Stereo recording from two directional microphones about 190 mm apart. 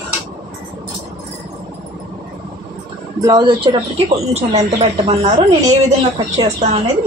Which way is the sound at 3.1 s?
20° right (ahead or behind).